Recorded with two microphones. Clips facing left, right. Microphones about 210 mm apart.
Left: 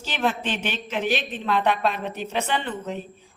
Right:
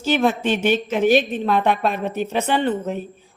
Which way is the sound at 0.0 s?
45° right (ahead or behind).